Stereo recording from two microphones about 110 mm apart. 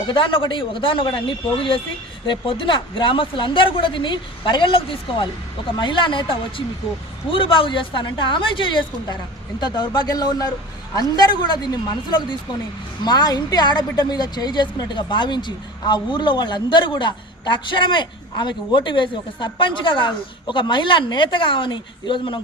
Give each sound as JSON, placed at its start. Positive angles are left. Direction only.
{"t": 0.1, "sound": "a woman's voice", "side_deg": 50}